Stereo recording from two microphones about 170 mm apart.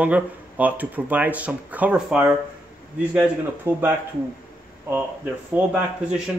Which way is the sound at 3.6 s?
10° right (ahead or behind).